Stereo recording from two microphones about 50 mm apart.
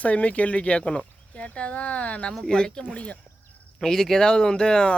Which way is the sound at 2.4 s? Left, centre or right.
Centre.